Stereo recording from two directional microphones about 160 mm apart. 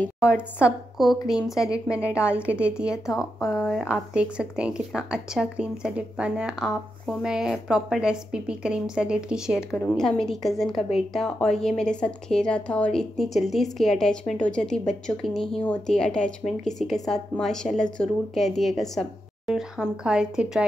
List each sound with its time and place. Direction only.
0.2 s a woman's voice: 5° right (ahead or behind)
3.3 s a woman's voice: 20° left (ahead or behind)
3.6 s a woman's voice: 5° right (ahead or behind)
9.7 s a woman's voice: 10° left (ahead or behind)